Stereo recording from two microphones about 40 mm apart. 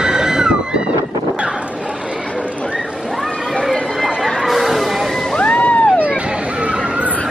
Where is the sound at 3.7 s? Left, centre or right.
Centre.